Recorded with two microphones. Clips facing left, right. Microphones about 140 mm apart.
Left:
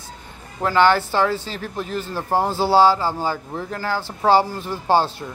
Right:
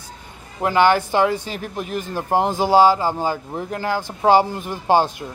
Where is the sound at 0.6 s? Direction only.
15° right (ahead or behind).